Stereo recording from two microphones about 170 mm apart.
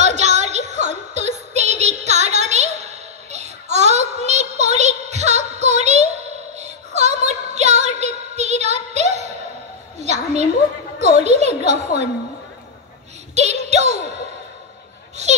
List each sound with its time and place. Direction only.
0.0 s music: 40° right (ahead or behind)
6.5 s a sound: 40° right (ahead or behind)
13.3 s child singing: 40° right (ahead or behind)